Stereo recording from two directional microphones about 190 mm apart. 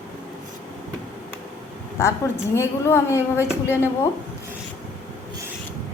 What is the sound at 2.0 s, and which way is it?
A woman's voice, 15° left (ahead or behind).